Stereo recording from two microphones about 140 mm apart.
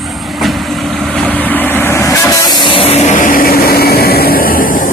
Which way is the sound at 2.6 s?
40° left (ahead or behind).